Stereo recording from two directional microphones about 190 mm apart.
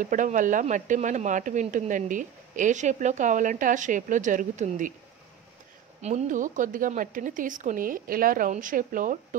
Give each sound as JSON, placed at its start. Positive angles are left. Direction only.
{"t": 0.0, "sound": "speech", "side_deg": -40}
{"t": 5.9, "sound": "a woman's voice", "side_deg": -35}